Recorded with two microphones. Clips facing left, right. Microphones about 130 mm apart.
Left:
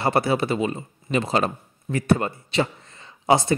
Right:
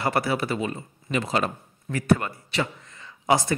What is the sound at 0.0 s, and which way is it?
Speech, 25° left (ahead or behind).